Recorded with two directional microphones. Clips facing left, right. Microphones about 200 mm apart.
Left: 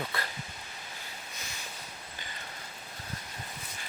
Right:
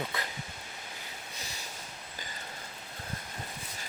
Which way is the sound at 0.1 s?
20° right (ahead or behind).